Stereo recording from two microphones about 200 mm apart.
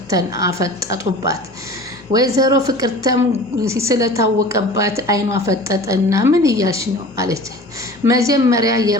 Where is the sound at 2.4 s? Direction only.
15° right (ahead or behind).